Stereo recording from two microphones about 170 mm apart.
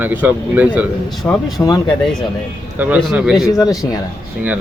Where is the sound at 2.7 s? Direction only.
5° right (ahead or behind).